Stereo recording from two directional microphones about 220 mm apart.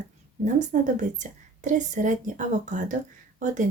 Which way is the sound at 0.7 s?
35° right (ahead or behind).